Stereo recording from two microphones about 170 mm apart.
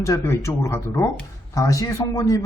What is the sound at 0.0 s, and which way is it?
Speech, 15° left (ahead or behind).